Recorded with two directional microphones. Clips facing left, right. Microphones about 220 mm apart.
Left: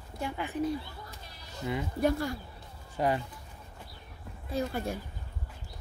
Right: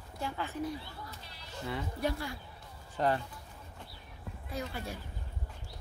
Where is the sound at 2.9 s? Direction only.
10° left (ahead or behind).